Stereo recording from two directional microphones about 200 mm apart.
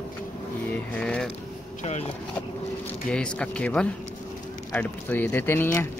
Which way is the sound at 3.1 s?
5° left (ahead or behind).